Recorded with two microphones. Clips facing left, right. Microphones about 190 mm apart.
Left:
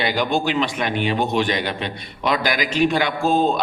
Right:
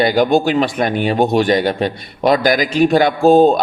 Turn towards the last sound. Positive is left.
turn(degrees=-40)  # may be behind; listen again after turning